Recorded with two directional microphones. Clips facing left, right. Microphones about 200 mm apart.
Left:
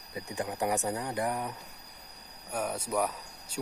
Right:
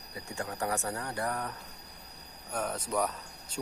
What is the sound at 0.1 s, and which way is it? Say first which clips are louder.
Speech: left 3 dB; 20° left (ahead or behind).